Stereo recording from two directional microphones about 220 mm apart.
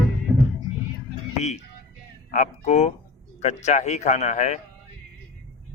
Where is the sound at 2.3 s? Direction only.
30° left (ahead or behind).